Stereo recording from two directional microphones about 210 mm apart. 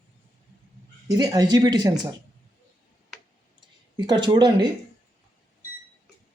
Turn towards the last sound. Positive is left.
turn(degrees=-20)  # may be behind; listen again after turning